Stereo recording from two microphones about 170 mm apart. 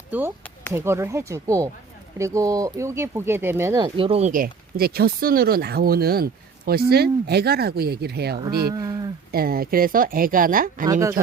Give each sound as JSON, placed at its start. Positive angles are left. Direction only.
{"t": 0.1, "sound": "speech", "side_deg": -10}
{"t": 3.8, "sound": "speech", "side_deg": -30}
{"t": 4.3, "sound": "speech", "side_deg": -60}
{"t": 8.7, "sound": "a sound", "side_deg": -25}
{"t": 9.3, "sound": "speech", "side_deg": -60}